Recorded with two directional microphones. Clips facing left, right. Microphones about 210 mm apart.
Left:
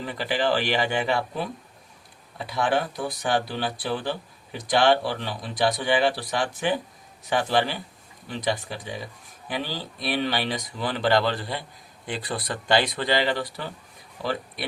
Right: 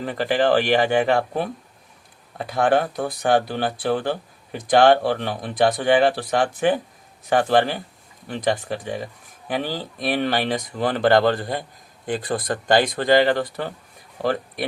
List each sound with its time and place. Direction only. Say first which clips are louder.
0.0 s speech: right 5 dB; 50° right (ahead or behind)